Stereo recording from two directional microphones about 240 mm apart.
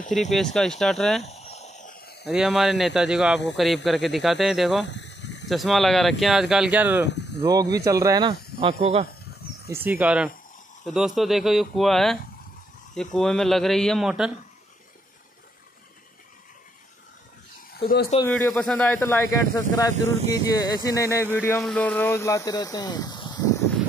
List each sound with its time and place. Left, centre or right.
0.3 s speech: centre
1.2 s a sound: left
2.2 s speech: centre
4.8 s a sound: left
5.5 s speech: centre
7.1 s speech: left
7.4 s speech: centre
9.7 s speech: centre
17.7 s speech: left
18.2 s speech: centre